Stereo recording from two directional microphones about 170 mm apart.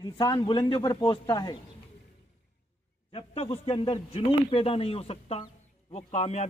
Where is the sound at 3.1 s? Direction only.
35° left (ahead or behind).